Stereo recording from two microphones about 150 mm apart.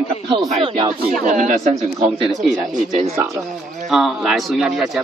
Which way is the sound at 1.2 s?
55° right (ahead or behind).